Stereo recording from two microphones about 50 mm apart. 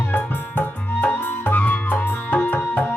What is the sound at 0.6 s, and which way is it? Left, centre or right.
Music, left.